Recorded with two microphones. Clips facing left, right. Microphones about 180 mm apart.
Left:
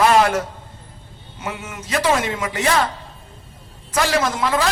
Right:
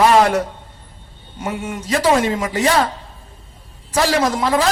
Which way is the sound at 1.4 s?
35° right (ahead or behind).